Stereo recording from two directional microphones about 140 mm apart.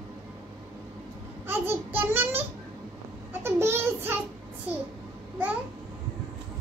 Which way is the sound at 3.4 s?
15° right (ahead or behind).